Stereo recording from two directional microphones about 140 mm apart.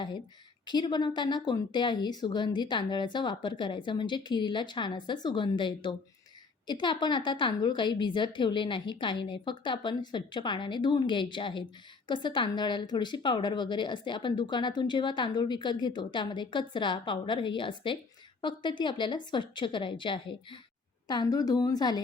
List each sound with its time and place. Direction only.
0.6 s a woman's voice: 30° left (ahead or behind)